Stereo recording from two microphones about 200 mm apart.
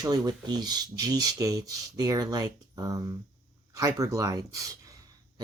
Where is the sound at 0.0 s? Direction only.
20° right (ahead or behind).